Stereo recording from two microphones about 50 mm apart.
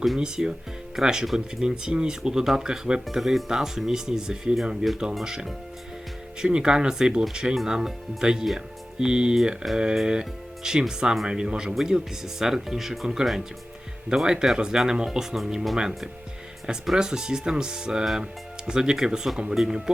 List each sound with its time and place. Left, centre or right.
0.2 s speech: centre
7.5 s speech: centre
8.5 s music: centre
9.7 s speech: centre